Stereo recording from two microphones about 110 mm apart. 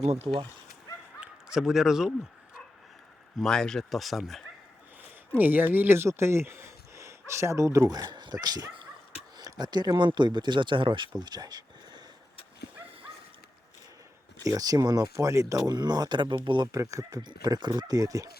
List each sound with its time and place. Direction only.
0.0 s speech: 75° right (ahead or behind)
1.2 s speech: 5° right (ahead or behind)
3.3 s speech: 5° left (ahead or behind)
5.4 s speech: 15° right (ahead or behind); by 12.0 s 40° right (ahead or behind)
14.4 s speech: 35° right (ahead or behind)
16.7 s speech: 30° right (ahead or behind)